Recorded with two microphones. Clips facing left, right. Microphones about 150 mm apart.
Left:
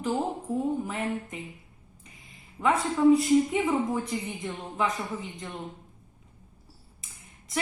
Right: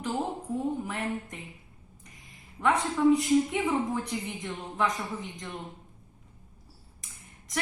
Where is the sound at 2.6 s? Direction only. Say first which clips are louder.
Left 1 dB; 10° left (ahead or behind).